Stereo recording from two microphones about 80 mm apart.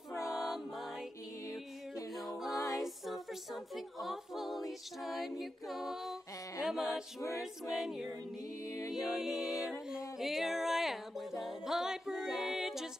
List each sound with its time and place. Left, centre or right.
0.3 s music: centre
2.1 s music: centre
2.5 s music: left
2.8 s a capella: centre
5.4 s music: centre
6.8 s a capella: left
7.7 s music: centre
8.6 s music: left
8.9 s music: centre